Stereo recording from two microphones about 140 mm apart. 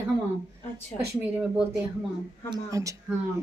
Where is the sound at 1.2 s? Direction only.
10° right (ahead or behind).